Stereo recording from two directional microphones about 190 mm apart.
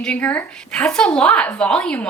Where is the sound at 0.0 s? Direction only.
5° left (ahead or behind).